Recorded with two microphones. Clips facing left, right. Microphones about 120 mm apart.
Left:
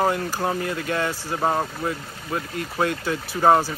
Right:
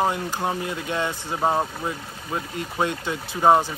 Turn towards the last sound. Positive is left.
turn(degrees=-10)  # may be behind; listen again after turning